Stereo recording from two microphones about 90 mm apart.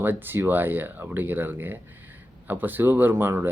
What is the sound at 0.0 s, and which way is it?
Speech, 20° right (ahead or behind).